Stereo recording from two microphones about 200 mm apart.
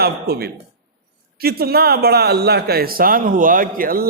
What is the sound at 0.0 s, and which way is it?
A man's voice, 50° right (ahead or behind).